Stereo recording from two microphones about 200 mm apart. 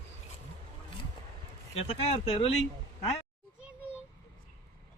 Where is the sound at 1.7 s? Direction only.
30° left (ahead or behind).